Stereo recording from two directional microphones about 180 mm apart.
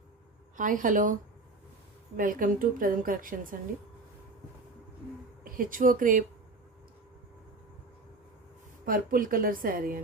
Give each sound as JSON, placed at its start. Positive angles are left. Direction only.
{"t": 0.5, "sound": "a woman's voice", "side_deg": -45}
{"t": 2.1, "sound": "a woman's voice", "side_deg": -50}
{"t": 5.4, "sound": "speech", "side_deg": -50}
{"t": 8.9, "sound": "a woman's voice", "side_deg": -50}